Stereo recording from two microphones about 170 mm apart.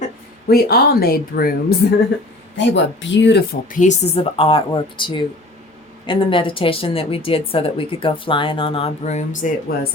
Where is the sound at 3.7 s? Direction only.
45° left (ahead or behind).